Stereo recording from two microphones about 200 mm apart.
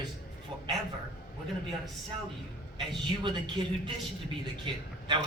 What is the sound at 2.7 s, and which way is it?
Speech, 25° right (ahead or behind).